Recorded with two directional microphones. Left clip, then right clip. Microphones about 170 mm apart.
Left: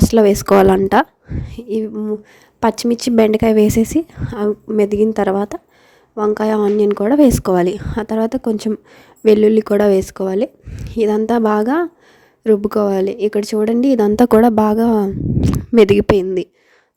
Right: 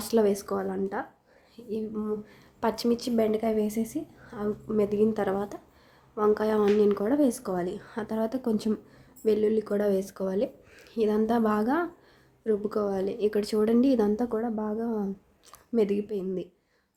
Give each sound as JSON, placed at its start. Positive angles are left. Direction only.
{"t": 0.0, "sound": "speech", "side_deg": 50}
{"t": 1.5, "sound": "a sound", "side_deg": 55}
{"t": 1.9, "sound": "speech", "side_deg": 35}
{"t": 2.6, "sound": "speech", "side_deg": 45}
{"t": 10.7, "sound": "a sound", "side_deg": 45}
{"t": 11.3, "sound": "speech", "side_deg": 45}
{"t": 14.2, "sound": "speech", "side_deg": 80}